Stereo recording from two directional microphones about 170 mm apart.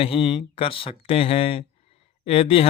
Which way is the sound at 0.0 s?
30° left (ahead or behind).